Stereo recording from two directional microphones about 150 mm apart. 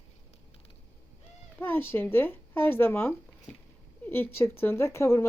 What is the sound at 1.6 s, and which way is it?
Speech, 15° left (ahead or behind).